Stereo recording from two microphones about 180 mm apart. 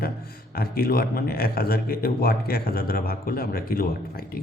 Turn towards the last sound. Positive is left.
turn(degrees=55)  # may be behind; listen again after turning